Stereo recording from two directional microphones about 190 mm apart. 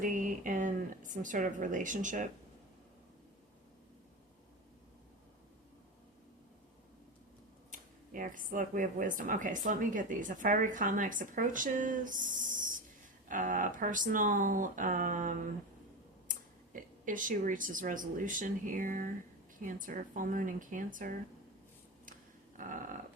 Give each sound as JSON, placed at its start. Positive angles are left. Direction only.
{"t": 0.0, "sound": "speech", "side_deg": -45}
{"t": 7.7, "sound": "speech", "side_deg": -45}
{"t": 22.5, "sound": "a sound", "side_deg": -45}